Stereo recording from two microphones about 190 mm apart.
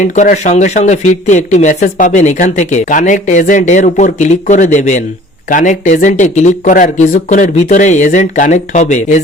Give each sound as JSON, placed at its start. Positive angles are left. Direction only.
{"t": 0.0, "sound": "speech", "side_deg": 40}